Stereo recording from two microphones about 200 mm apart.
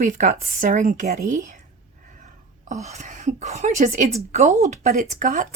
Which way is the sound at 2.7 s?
35° right (ahead or behind).